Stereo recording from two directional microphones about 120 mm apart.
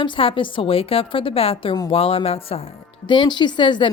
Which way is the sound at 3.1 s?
40° left (ahead or behind).